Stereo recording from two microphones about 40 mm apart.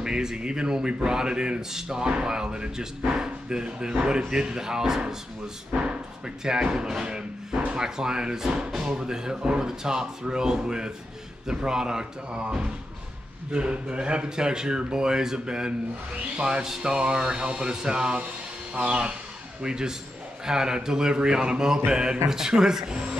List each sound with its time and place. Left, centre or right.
0.0 s speech: centre
5.7 s speech: right